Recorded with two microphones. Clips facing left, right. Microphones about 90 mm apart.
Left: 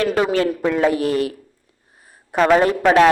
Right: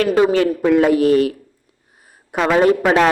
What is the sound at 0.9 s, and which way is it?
Speech, 35° left (ahead or behind).